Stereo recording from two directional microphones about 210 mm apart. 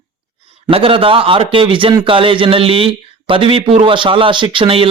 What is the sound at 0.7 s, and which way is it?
A man's voice, 25° right (ahead or behind).